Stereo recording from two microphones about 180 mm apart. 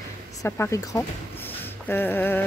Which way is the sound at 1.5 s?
10° left (ahead or behind).